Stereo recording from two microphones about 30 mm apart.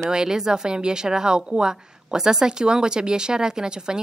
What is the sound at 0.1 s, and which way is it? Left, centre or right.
A woman's voice, right.